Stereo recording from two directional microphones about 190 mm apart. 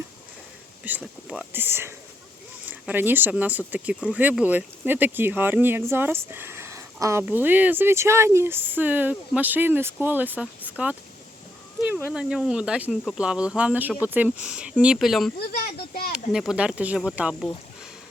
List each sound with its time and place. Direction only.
0.9 s speech: 5° right (ahead or behind)
12.1 s speech: 5° right (ahead or behind)
15.4 s a sound: 55° left (ahead or behind)
16.1 s speech: centre (ahead or behind)